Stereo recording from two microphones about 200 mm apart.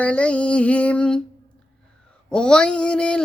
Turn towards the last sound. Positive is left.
turn(degrees=5)  # may be behind; listen again after turning